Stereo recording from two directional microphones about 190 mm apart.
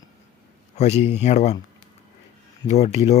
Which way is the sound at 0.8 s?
35° left (ahead or behind).